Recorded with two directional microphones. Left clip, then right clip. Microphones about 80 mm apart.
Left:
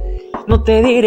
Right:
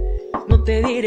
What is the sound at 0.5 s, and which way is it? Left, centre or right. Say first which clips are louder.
Music: left 10 dB; left.